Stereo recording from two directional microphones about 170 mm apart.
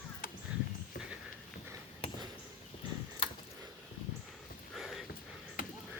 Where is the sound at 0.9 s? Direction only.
60° left (ahead or behind).